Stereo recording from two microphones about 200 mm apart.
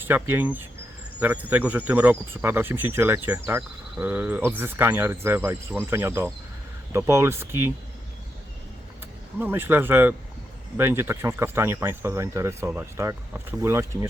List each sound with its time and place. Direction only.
0.0 s speech: 10° right (ahead or behind)
9.4 s speech: 10° right (ahead or behind)